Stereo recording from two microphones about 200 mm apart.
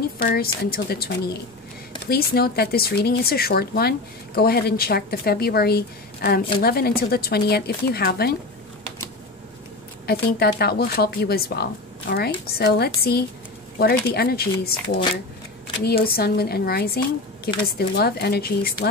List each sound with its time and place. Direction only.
0.2 s speech: 50° left (ahead or behind)
10.0 s speech: 50° left (ahead or behind)